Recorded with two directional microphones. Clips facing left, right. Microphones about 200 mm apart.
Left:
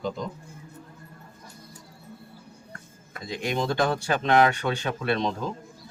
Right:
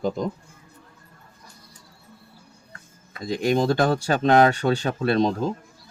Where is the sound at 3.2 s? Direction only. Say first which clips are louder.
Right 7 dB; 40° right (ahead or behind).